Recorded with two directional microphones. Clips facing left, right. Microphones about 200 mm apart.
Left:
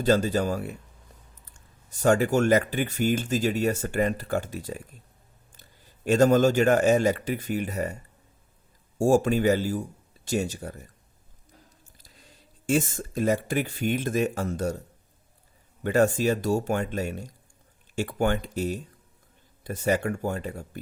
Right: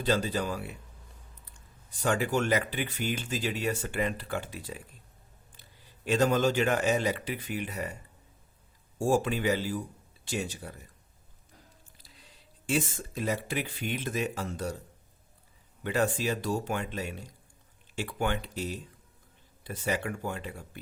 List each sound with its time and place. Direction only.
0.0 s speech: 45° left (ahead or behind)
1.9 s speech: 45° left (ahead or behind)
9.0 s speech: 45° left (ahead or behind)
11.9 s speech: 45° left (ahead or behind)
15.8 s speech: 45° left (ahead or behind)